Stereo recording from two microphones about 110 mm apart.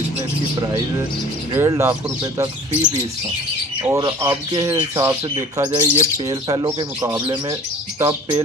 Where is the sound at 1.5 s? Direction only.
25° right (ahead or behind).